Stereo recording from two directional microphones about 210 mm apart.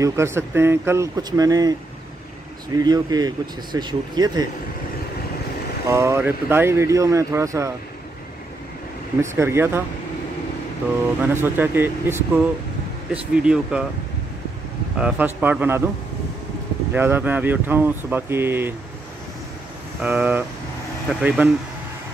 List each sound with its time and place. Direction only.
0.0 s speech: 15° right (ahead or behind)
5.9 s speech: 15° right (ahead or behind)
9.2 s speech: 10° right (ahead or behind)
11.2 s speech: 10° right (ahead or behind)
15.0 s speech: 5° right (ahead or behind)
16.9 s speech: 10° right (ahead or behind)
20.0 s speech: 5° right (ahead or behind)